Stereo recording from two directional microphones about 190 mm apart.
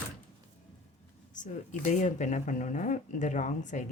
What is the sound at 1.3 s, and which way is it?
Speech, 40° left (ahead or behind).